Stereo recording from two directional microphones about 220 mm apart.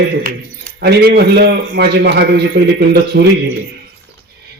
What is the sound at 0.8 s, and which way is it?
A man's voice, 50° right (ahead or behind).